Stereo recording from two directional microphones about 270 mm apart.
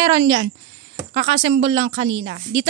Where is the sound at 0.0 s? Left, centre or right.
Centre.